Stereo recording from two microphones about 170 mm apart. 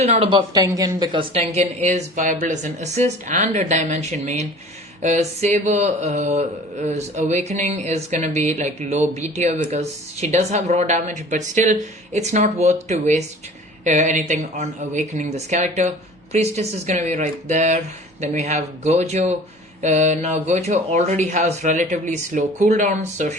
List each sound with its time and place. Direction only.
0.0 s speech: 35° right (ahead or behind)